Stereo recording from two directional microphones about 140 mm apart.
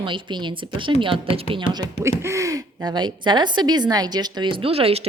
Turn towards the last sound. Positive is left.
turn(degrees=-45)  # may be behind; listen again after turning